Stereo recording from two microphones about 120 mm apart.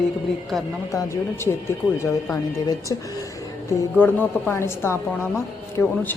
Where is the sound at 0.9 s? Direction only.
25° left (ahead or behind).